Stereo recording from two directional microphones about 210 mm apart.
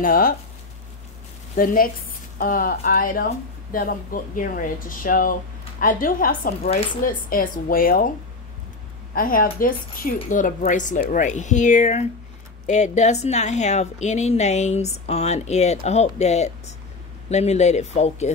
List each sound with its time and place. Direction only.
0.0 s a woman's voice: 40° left (ahead or behind)
1.6 s a woman's voice: 40° left (ahead or behind)
9.1 s a woman's voice: 45° left (ahead or behind)